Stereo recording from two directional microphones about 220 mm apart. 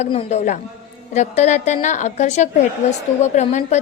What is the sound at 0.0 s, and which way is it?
A woman's voice, 25° left (ahead or behind).